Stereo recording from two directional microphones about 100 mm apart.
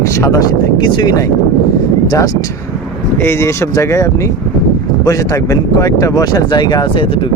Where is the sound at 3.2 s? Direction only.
25° left (ahead or behind).